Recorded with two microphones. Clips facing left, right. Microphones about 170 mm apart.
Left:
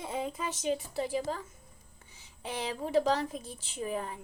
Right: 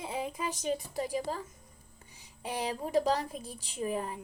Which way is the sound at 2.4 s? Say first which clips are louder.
Right 1 dB; 40° right (ahead or behind).